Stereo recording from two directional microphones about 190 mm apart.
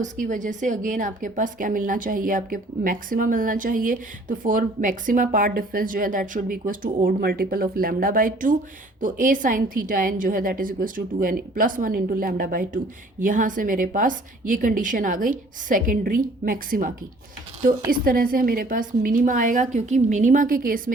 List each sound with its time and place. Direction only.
0.0 s a woman's voice: 40° right (ahead or behind)